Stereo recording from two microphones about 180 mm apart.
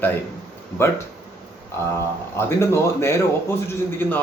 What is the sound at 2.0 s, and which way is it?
Speech, 15° left (ahead or behind).